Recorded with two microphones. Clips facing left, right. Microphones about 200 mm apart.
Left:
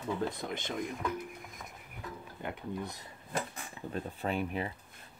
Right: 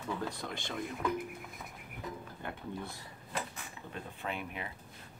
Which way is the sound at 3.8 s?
40° left (ahead or behind).